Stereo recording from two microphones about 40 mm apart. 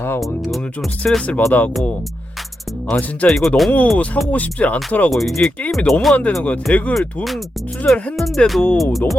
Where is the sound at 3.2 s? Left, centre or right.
Centre.